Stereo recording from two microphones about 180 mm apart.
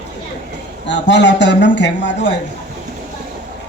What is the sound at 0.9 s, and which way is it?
A man's voice, 80° left.